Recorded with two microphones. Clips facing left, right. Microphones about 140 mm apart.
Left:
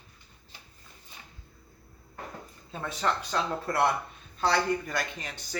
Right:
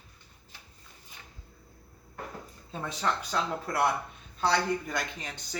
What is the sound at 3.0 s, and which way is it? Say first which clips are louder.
Speech: left 1 dB; 5° right (ahead or behind).